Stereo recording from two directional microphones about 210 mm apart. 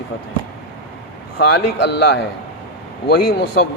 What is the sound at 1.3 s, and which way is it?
Speech, 55° left (ahead or behind).